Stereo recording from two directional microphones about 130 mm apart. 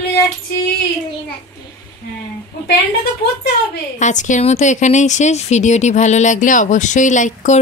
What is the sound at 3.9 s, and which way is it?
Speech, 70° left (ahead or behind).